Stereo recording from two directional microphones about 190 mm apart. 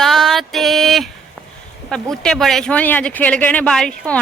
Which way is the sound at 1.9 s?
5° left (ahead or behind).